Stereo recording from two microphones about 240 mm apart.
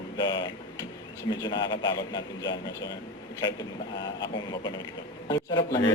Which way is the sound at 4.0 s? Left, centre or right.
Centre.